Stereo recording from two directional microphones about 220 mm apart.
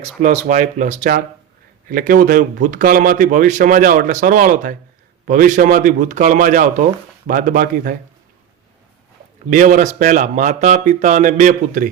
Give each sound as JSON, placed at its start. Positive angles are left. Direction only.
{"t": 0.2, "sound": "speech", "side_deg": -35}
{"t": 9.5, "sound": "speech", "side_deg": -35}